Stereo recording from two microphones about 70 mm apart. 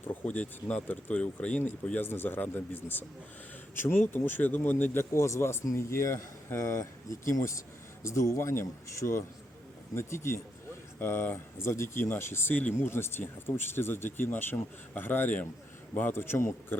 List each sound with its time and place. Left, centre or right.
0.1 s speech: centre
1.6 s speech: left
5.1 s speech: left